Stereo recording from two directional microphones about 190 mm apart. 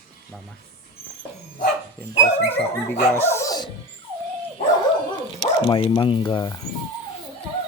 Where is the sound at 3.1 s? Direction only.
15° left (ahead or behind).